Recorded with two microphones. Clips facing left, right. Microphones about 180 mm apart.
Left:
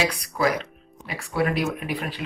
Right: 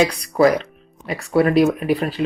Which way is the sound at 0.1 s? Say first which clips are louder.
Right 8 dB; 35° right (ahead or behind).